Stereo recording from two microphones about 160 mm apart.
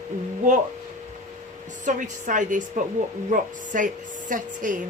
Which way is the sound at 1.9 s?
55° right (ahead or behind).